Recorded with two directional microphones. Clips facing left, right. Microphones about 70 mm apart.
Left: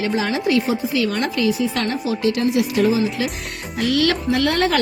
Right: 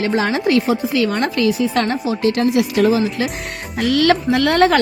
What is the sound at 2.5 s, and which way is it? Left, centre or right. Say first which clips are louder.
Speech: right 3 dB; right.